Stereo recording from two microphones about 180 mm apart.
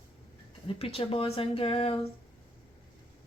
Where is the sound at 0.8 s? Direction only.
35° left (ahead or behind).